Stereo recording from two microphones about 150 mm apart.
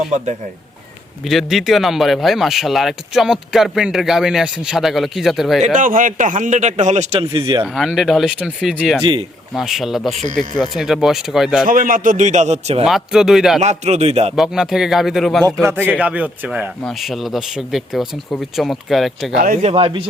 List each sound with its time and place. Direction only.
1.2 s speech: centre (ahead or behind)
5.6 s a man's voice: 60° right (ahead or behind)
7.2 s speech: 30° right (ahead or behind)
7.7 s speech: centre (ahead or behind)
11.6 s a man's voice: 70° right (ahead or behind); by 12.8 s 45° right (ahead or behind)
12.8 s speech: 5° right (ahead or behind)
13.6 s a man's voice: 50° right (ahead or behind)
14.3 s speech: 5° right (ahead or behind)
15.6 s a man's voice: 15° right (ahead or behind)
19.6 s speech: 40° right (ahead or behind)